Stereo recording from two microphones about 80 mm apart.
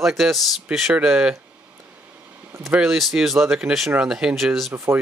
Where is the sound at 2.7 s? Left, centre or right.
Centre.